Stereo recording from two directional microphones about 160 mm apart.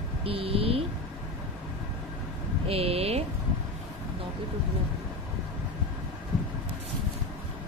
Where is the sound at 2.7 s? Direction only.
40° right (ahead or behind).